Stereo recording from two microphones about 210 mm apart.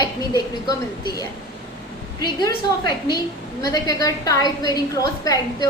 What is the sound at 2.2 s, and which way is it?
A woman's voice, 20° left (ahead or behind).